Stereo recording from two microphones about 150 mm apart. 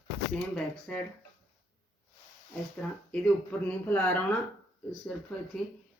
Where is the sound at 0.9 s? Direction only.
5° left (ahead or behind).